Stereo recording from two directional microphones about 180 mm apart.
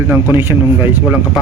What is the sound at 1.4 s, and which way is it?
Speech, centre (ahead or behind).